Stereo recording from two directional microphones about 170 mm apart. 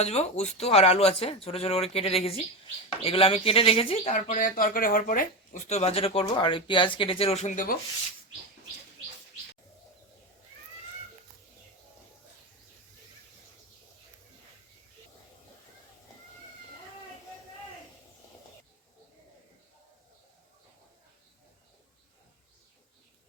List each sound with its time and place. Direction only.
0.0 s speech: 40° left (ahead or behind)